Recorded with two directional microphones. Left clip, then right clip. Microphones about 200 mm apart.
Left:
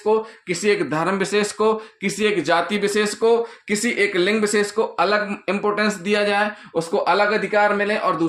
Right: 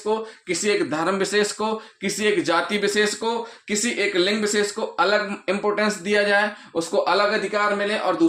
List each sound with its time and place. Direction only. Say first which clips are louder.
0.4 s speech: left 2 dB; 35° left (ahead or behind)